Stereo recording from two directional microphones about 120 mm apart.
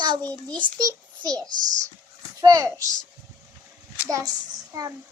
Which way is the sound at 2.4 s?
30° right (ahead or behind).